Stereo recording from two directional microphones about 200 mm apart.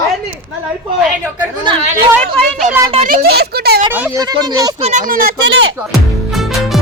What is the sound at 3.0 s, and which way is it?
Speech, 50° right (ahead or behind).